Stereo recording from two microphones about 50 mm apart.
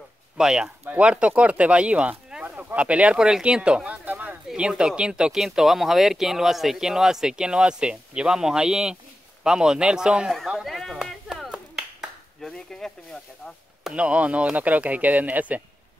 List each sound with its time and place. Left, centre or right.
0.4 s speech: centre
2.5 s a sound: right
3.2 s speech: centre; by 4.4 s right
4.6 s speech: centre
5.4 s speech: centre
10.6 s a sound: centre
12.4 s snake: centre
13.9 s speech: right